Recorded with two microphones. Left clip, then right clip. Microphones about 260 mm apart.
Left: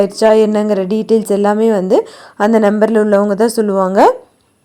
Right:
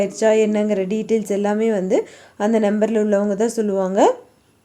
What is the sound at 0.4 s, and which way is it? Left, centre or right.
Speech, left.